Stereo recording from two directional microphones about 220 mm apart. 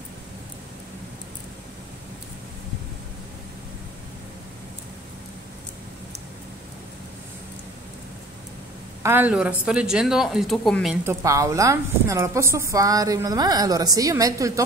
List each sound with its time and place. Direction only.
9.0 s speech: 10° right (ahead or behind)
11.1 s a woman's voice: 15° right (ahead or behind)